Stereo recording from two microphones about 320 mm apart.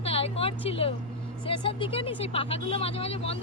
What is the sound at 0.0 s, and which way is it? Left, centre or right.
A woman's voice, centre.